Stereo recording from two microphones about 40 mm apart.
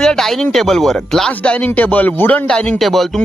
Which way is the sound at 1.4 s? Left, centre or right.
Left.